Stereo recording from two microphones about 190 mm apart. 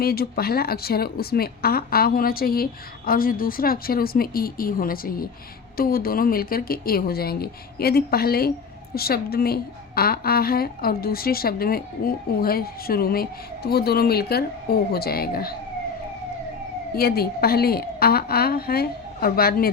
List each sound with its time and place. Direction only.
0.0 s a woman's voice: 55° left (ahead or behind)
16.9 s a woman's voice: 55° left (ahead or behind)